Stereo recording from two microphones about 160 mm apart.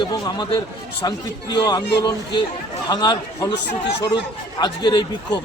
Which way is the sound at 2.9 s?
25° left (ahead or behind).